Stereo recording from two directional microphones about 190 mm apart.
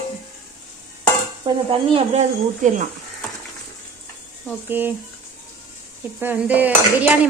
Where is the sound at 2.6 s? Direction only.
40° right (ahead or behind).